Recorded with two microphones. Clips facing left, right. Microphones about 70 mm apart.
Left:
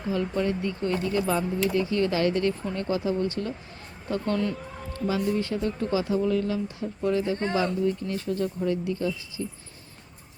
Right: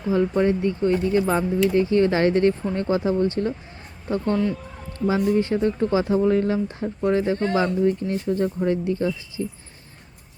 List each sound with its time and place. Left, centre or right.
0.1 s speech: right